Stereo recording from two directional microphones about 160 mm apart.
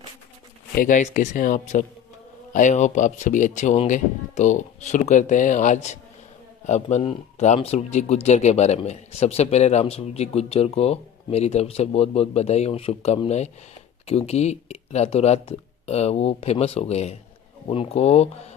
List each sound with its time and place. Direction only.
0.7 s speech: 55° left (ahead or behind)